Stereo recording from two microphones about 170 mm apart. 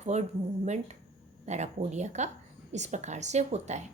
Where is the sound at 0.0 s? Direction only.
40° right (ahead or behind).